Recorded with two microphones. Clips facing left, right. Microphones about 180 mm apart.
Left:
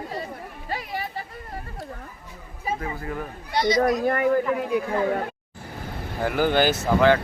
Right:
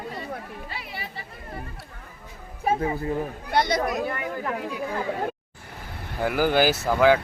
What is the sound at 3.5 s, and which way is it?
Speech, 55° right (ahead or behind).